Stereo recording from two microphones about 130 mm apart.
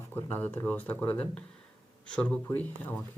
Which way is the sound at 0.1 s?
15° left (ahead or behind).